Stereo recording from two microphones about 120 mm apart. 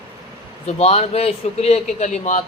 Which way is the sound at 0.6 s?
60° left (ahead or behind).